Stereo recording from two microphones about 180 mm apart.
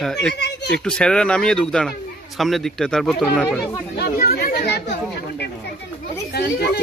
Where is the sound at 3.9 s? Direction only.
60° left (ahead or behind).